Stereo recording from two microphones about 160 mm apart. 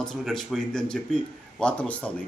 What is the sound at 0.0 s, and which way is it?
A man's voice, 5° left (ahead or behind).